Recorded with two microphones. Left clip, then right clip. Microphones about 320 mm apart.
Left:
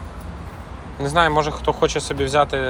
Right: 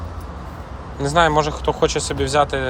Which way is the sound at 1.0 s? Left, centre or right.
Centre.